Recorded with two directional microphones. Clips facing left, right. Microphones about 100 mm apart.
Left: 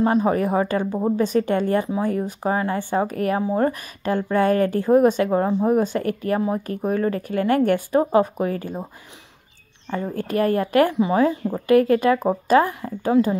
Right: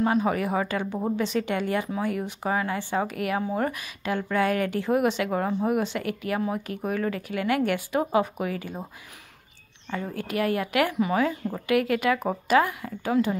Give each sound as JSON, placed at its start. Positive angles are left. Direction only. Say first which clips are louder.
{"t": 0.0, "sound": "speech", "louder": "left 5 dB", "side_deg": 35}
{"t": 5.8, "sound": "speech", "louder": "left 6 dB", "side_deg": 40}
{"t": 9.8, "sound": "speech", "louder": "left 5 dB", "side_deg": 30}